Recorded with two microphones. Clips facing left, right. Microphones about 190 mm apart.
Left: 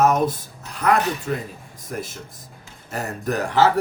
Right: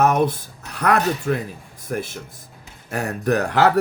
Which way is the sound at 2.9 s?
65° right (ahead or behind).